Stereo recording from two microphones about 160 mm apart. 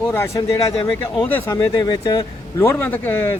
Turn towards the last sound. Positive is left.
turn(degrees=10)  # may be behind; listen again after turning